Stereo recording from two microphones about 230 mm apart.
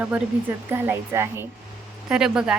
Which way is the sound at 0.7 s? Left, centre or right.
Centre.